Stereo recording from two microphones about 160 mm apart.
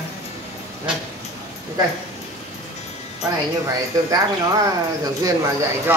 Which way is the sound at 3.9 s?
20° right (ahead or behind).